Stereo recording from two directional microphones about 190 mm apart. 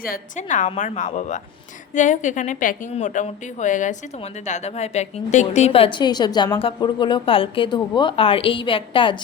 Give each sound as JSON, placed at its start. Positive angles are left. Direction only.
{"t": 0.0, "sound": "a woman's voice", "side_deg": 45}